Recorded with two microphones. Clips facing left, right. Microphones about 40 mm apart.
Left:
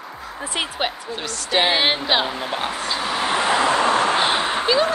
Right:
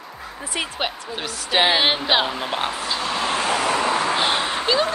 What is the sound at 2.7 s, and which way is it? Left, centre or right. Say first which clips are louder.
Speech: left 1 dB; centre.